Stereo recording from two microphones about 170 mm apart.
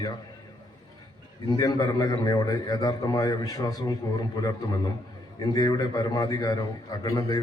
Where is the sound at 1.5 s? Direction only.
25° left (ahead or behind).